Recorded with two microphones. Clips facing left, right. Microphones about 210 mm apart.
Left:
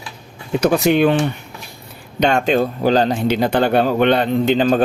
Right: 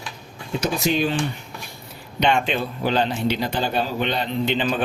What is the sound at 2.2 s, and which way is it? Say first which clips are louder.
Speech: left 6 dB; 45° left (ahead or behind).